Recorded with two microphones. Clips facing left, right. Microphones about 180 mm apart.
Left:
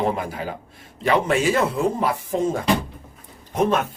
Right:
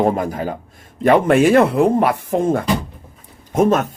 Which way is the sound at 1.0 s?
55° right (ahead or behind).